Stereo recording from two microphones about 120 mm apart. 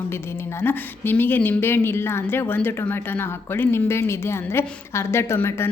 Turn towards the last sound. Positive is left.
turn(degrees=20)  # may be behind; listen again after turning